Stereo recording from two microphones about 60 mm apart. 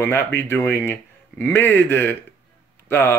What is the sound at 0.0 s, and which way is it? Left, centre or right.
Speech, left.